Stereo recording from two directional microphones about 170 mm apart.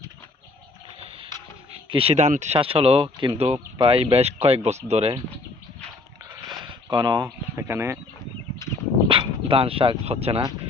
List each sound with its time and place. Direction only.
1.0 s music: 30° right (ahead or behind)
1.9 s speech: 35° right (ahead or behind)
6.6 s a sound: 25° right (ahead or behind)
7.5 s speech: 15° right (ahead or behind)
8.6 s a sound: 20° left (ahead or behind)
9.0 s speech: 30° right (ahead or behind)